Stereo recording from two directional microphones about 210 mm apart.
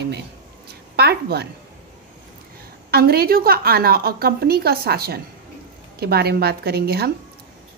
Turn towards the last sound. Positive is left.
turn(degrees=-50)  # may be behind; listen again after turning